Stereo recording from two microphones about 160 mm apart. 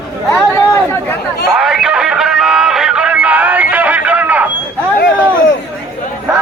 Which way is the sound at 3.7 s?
10° right (ahead or behind).